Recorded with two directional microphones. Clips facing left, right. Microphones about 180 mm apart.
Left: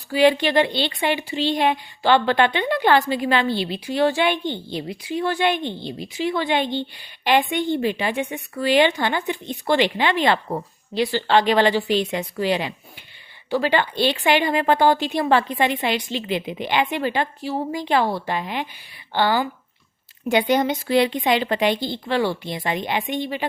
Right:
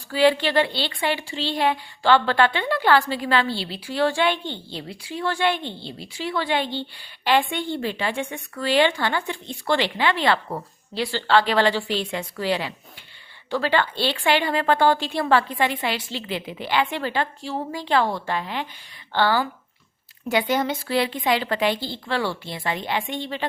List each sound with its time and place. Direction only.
0.1 s a woman's voice: 15° left (ahead or behind)
20.5 s a woman's voice: 20° left (ahead or behind)